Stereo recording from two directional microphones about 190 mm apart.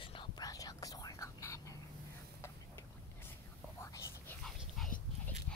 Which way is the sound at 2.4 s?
10° left (ahead or behind).